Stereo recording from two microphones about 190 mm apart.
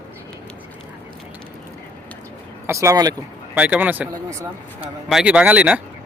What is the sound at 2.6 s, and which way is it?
Speech, 15° right (ahead or behind).